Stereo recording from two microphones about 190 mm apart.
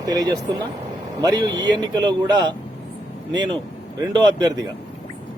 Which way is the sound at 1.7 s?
20° right (ahead or behind).